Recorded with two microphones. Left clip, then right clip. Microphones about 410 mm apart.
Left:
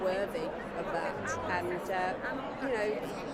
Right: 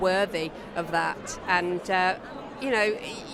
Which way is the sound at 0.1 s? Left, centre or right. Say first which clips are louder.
Right 7 dB; right.